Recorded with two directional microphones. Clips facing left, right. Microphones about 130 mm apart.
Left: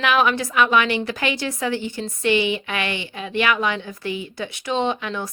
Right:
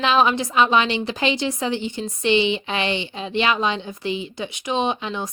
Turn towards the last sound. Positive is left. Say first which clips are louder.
# even
turn(degrees=-20)  # may be behind; listen again after turning